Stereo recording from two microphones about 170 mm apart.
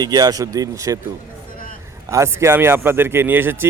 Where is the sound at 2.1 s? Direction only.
15° right (ahead or behind).